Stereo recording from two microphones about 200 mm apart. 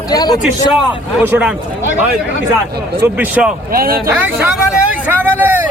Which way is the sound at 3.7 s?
45° right (ahead or behind).